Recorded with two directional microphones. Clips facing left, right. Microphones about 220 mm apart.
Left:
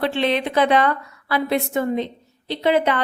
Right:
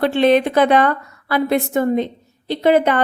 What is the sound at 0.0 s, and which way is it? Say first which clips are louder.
A woman's voice: right 7 dB; 45° right (ahead or behind).